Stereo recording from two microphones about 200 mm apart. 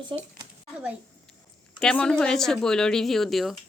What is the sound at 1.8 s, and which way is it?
Speech, 5° left (ahead or behind).